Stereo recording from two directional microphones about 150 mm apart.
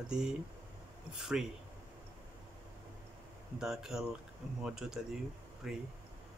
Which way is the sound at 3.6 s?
5° right (ahead or behind).